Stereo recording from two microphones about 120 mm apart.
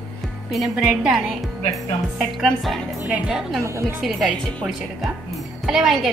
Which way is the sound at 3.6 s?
25° right (ahead or behind).